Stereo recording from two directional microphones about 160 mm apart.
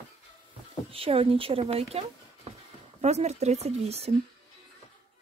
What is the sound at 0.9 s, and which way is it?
Speech, 35° right (ahead or behind).